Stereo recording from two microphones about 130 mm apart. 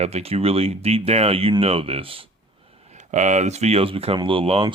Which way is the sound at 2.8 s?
65° right (ahead or behind).